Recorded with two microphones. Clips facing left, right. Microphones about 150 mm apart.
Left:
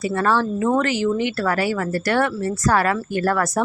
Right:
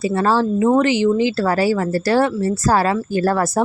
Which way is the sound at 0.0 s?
30° right (ahead or behind).